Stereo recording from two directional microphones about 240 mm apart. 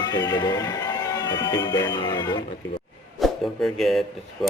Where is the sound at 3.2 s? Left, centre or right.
Centre.